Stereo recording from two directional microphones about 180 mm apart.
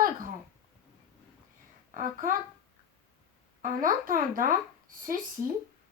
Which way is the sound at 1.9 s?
45° right (ahead or behind).